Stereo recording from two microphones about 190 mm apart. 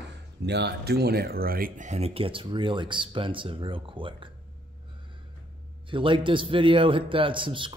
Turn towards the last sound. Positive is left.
turn(degrees=-25)  # may be behind; listen again after turning